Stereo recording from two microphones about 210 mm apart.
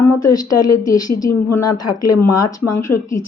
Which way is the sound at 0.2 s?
15° left (ahead or behind).